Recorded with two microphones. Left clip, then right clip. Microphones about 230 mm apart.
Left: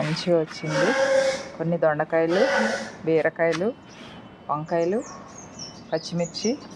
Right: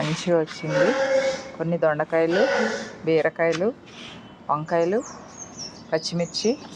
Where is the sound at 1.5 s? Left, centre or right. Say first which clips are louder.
Right 1 dB; centre.